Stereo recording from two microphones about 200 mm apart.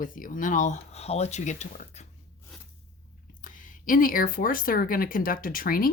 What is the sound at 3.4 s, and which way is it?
Speech, 40° left (ahead or behind).